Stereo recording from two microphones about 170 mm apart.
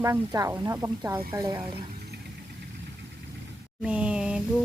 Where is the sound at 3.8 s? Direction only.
5° right (ahead or behind).